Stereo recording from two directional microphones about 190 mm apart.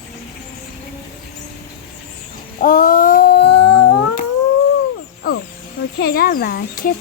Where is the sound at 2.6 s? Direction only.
45° left (ahead or behind); by 3.7 s 60° left (ahead or behind).